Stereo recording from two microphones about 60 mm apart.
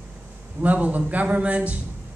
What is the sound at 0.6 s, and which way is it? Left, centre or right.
Speech, right.